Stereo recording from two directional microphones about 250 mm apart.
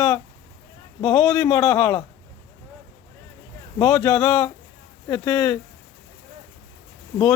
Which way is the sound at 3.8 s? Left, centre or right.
Centre.